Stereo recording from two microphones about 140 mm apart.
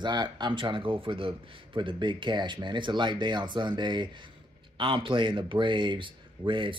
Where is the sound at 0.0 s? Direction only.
30° right (ahead or behind).